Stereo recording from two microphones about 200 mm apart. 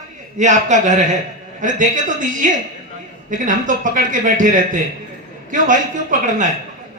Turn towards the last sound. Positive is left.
turn(degrees=-40)  # may be behind; listen again after turning